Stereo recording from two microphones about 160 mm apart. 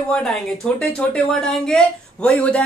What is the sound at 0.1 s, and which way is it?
Speech, 5° left (ahead or behind).